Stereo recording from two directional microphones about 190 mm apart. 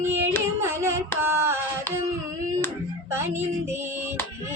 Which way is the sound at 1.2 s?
10° right (ahead or behind).